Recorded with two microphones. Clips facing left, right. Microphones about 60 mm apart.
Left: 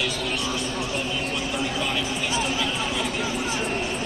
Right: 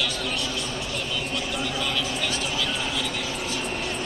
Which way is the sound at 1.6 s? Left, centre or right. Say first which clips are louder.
Left 1 dB; centre.